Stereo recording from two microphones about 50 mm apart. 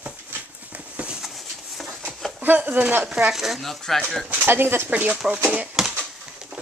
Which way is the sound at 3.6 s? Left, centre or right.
Centre.